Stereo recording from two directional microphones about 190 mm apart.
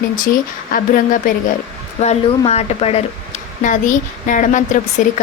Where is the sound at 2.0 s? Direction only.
30° left (ahead or behind).